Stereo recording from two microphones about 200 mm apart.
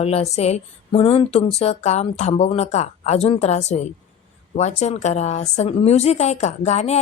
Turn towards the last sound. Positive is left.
turn(degrees=35)  # may be behind; listen again after turning